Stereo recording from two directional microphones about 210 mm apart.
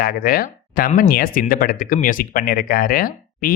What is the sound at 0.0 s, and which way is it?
Speech, 45° left (ahead or behind).